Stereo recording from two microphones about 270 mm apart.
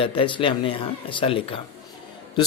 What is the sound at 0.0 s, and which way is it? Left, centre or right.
Speech, centre.